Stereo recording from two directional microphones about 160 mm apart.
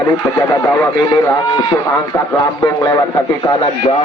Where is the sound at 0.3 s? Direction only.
20° left (ahead or behind).